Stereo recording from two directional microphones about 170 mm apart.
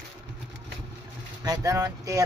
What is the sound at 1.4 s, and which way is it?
Speech, 20° right (ahead or behind).